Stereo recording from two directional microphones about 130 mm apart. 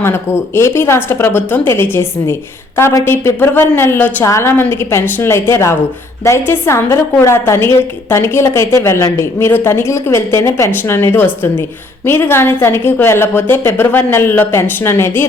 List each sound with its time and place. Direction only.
0.0 s a woman's voice: 20° left (ahead or behind)